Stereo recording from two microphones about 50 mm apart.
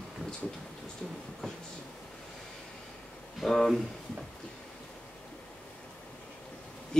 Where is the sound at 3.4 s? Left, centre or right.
Centre.